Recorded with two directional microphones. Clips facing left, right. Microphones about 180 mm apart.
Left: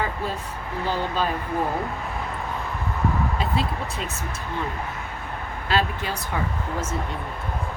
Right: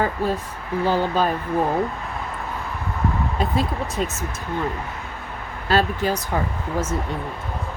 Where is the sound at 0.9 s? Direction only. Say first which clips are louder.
Right 5 dB; 45° right (ahead or behind).